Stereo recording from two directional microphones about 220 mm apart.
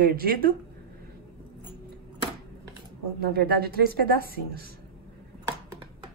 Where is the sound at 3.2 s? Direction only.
45° right (ahead or behind).